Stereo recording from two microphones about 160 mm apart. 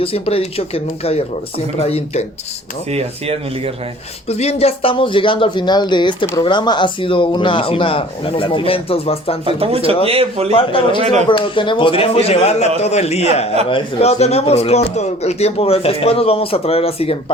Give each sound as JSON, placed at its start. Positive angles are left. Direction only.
{"t": 0.0, "sound": "speech", "side_deg": 35}
{"t": 2.9, "sound": "speech", "side_deg": -40}
{"t": 4.3, "sound": "speech", "side_deg": 40}
{"t": 9.5, "sound": "speech", "side_deg": -35}
{"t": 10.5, "sound": "speech", "side_deg": 35}